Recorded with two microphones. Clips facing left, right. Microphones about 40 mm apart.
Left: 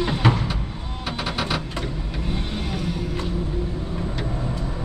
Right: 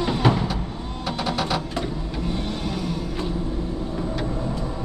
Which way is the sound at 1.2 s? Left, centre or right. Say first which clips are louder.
Right 1 dB; centre.